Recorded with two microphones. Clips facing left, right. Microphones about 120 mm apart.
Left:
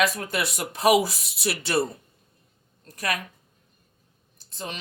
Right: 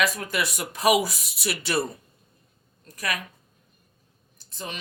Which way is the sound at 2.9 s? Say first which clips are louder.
Left 2 dB; 40° left (ahead or behind).